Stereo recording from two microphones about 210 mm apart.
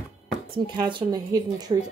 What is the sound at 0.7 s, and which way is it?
Speech, 20° right (ahead or behind).